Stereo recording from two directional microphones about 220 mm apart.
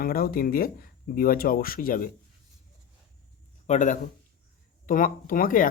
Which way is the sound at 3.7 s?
35° left (ahead or behind).